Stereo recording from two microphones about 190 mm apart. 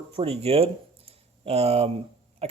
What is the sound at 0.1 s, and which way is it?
Speech, 30° right (ahead or behind).